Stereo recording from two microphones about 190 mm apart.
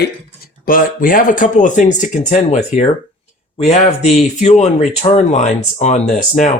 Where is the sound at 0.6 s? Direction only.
50° left (ahead or behind).